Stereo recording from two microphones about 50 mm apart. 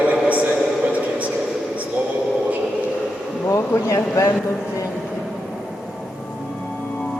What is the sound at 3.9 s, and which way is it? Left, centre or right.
Speech, left.